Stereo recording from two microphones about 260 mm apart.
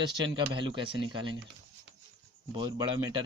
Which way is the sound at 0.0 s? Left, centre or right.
Centre.